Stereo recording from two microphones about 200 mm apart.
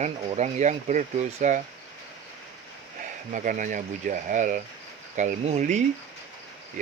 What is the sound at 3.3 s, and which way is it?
Speech, 40° right (ahead or behind).